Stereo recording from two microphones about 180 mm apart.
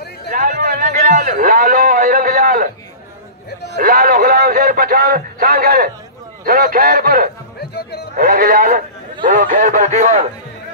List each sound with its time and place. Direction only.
0.3 s a sound: 50° right (ahead or behind)
3.7 s a man's voice: 55° right (ahead or behind)
7.5 s music: 65° left (ahead or behind)
8.2 s a man's voice: 50° right (ahead or behind)